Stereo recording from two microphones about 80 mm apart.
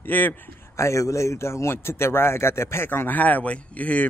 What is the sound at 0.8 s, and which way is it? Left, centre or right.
A man's voice, left.